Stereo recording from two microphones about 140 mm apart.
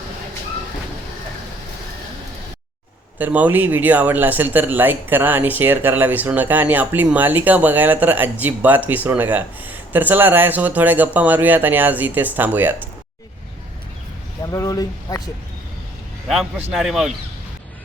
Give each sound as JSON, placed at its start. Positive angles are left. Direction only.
{"t": 3.2, "sound": "speech", "side_deg": -10}
{"t": 14.4, "sound": "speech", "side_deg": 25}
{"t": 16.7, "sound": "speech", "side_deg": 0}